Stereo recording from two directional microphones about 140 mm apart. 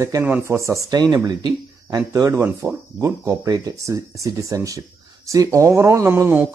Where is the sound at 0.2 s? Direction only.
15° right (ahead or behind).